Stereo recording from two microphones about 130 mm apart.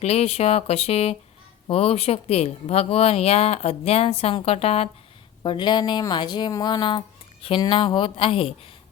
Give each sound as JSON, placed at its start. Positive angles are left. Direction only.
{"t": 0.0, "sound": "speech", "side_deg": 55}
{"t": 5.4, "sound": "speech", "side_deg": 35}